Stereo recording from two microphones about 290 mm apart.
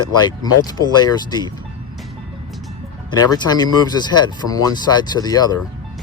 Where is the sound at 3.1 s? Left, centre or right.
Centre.